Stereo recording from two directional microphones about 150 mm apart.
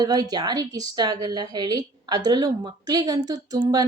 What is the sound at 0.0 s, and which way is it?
Speech, 25° right (ahead or behind).